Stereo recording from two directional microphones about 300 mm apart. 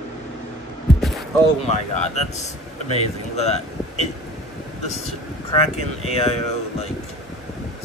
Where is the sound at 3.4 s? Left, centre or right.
Left.